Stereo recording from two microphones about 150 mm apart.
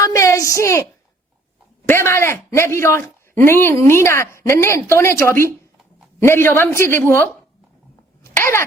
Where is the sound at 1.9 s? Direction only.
15° left (ahead or behind).